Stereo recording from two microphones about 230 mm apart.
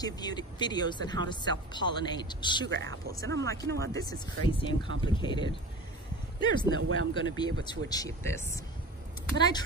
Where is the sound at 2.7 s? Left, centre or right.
Right.